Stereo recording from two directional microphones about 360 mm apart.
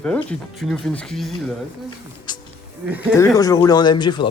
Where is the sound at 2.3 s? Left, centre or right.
Centre.